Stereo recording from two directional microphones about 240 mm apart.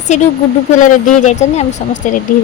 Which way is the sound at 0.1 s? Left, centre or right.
Left.